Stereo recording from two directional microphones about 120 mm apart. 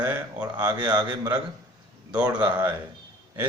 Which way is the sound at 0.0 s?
10° right (ahead or behind).